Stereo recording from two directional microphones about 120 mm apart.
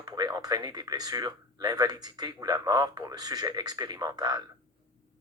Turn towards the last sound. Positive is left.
turn(degrees=-35)  # may be behind; listen again after turning